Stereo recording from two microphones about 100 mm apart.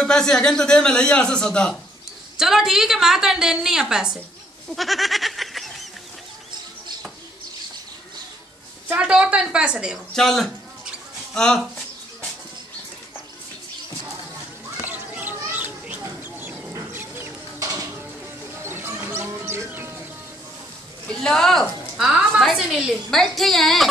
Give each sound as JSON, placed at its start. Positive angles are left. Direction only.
{"t": 0.0, "sound": "speech", "side_deg": 5}
{"t": 2.3, "sound": "a woman's voice", "side_deg": -5}
{"t": 4.6, "sound": "goat", "side_deg": 0}
{"t": 8.9, "sound": "a woman's voice", "side_deg": -10}
{"t": 10.1, "sound": "a woman's voice", "side_deg": 5}
{"t": 11.3, "sound": "a sound", "side_deg": 5}
{"t": 14.9, "sound": "a sound", "side_deg": -20}
{"t": 16.0, "sound": "chicken", "side_deg": -20}
{"t": 17.6, "sound": "a sound", "side_deg": -35}
{"t": 18.5, "sound": "bird", "side_deg": -25}
{"t": 21.1, "sound": "a woman's voice", "side_deg": 5}